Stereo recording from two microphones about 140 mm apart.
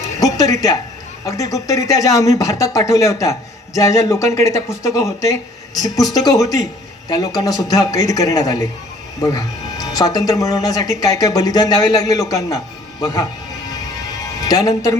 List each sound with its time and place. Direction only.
0.2 s music: 25° left (ahead or behind)
1.2 s speech: 25° left (ahead or behind)
14.4 s speech: 25° left (ahead or behind)